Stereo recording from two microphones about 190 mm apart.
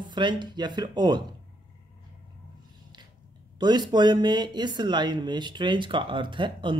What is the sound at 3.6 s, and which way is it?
Speech, 25° right (ahead or behind).